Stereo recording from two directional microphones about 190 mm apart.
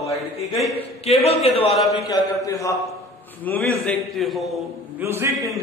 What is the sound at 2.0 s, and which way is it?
A man's voice, 20° left (ahead or behind).